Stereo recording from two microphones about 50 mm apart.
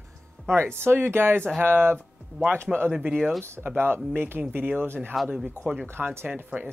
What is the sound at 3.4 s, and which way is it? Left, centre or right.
Speech, right.